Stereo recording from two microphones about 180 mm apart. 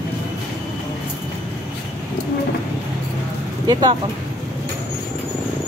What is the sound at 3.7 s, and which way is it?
Vehicle, 25° right (ahead or behind).